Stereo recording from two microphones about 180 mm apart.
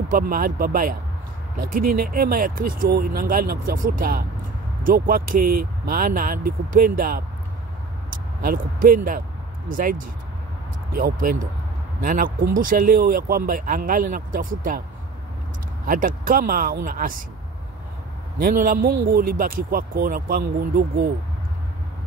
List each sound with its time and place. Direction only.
0.1 s speech: 55° right (ahead or behind)
15.9 s speech: 50° right (ahead or behind)
18.4 s speech: 50° right (ahead or behind)